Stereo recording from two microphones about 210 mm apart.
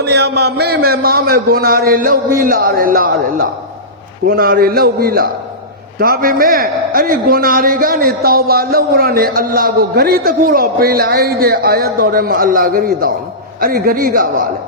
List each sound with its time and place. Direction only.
0.0 s a man's voice: 50° right (ahead or behind)